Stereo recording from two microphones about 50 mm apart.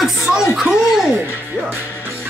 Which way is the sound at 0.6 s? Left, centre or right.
Centre.